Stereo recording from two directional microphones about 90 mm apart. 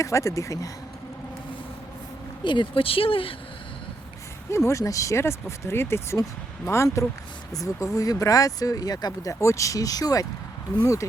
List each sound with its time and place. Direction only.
0.0 s speech: 35° left (ahead or behind)
2.4 s speech: 60° left (ahead or behind); by 3.3 s 80° left
4.5 s speech: 35° left (ahead or behind)
9.4 s speech: 35° left (ahead or behind)